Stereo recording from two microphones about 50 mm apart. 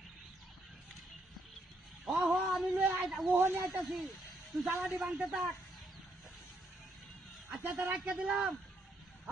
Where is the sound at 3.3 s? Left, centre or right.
Right.